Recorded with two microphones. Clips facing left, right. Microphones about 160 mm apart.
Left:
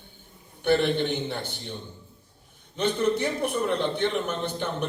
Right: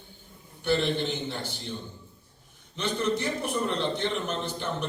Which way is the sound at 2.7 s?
60° left (ahead or behind).